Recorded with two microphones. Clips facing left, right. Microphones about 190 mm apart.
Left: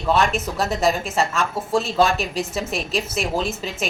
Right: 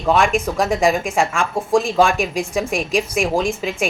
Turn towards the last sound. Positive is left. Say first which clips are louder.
# right 5 dB
turn(degrees=-10)  # may be behind; listen again after turning